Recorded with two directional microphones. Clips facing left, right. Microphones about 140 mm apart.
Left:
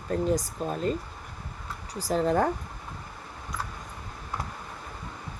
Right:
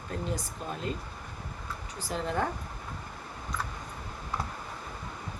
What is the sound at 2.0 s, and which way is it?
Speech, 40° left (ahead or behind).